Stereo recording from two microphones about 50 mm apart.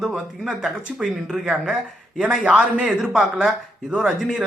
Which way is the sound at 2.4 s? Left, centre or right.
Right.